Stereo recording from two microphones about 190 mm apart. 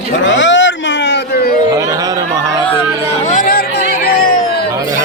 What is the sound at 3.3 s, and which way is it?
Chatter, 45° left (ahead or behind).